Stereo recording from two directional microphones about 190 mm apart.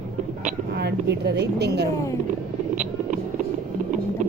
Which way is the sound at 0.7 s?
60° right (ahead or behind).